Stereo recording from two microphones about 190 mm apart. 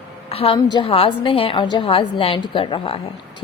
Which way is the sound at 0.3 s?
30° left (ahead or behind).